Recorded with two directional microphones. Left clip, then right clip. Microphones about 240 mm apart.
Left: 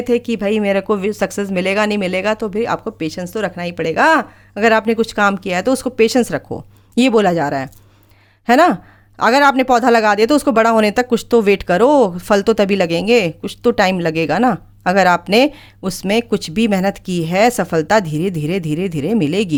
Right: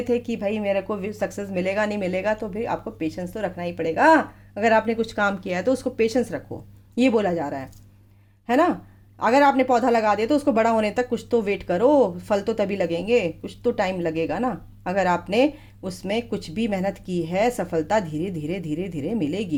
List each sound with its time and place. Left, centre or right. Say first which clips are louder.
0.0 s speech: left 7 dB; left